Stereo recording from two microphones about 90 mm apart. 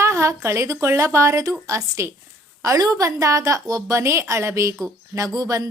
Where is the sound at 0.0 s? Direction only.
30° right (ahead or behind).